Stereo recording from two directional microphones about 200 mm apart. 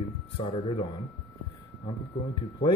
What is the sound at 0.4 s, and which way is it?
Speech, 30° left (ahead or behind).